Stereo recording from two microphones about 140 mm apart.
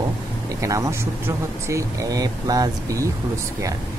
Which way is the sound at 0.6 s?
20° right (ahead or behind).